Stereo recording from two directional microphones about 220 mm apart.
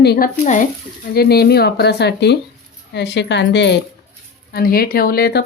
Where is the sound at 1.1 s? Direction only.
45° left (ahead or behind).